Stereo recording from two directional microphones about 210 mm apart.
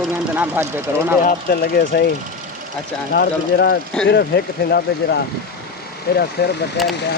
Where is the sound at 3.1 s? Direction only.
50° left (ahead or behind).